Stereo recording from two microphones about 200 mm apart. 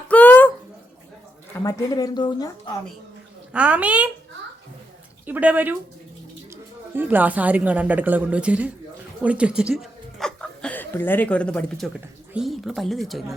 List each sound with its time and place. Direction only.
0.1 s a sound: 10° left (ahead or behind)
1.6 s speech: 20° left (ahead or behind)
3.5 s a woman's voice: 5° right (ahead or behind)
5.2 s speech: 10° right (ahead or behind)
6.9 s a woman's voice: 10° right (ahead or behind)